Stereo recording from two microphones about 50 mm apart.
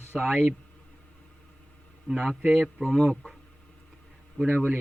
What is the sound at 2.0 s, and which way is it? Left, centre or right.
Speech, centre.